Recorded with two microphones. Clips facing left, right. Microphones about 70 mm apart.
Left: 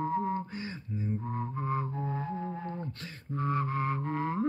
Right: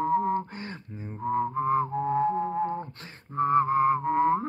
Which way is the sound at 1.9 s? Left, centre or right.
Right.